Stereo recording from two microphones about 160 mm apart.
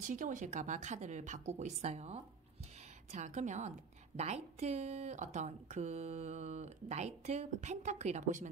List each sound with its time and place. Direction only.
0.0 s speech: 50° right (ahead or behind)